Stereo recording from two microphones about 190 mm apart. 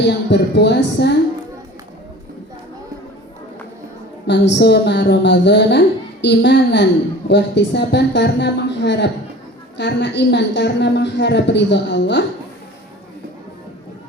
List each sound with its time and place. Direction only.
0.0 s a woman's voice: 65° left (ahead or behind)
4.3 s a woman's voice: 65° left (ahead or behind)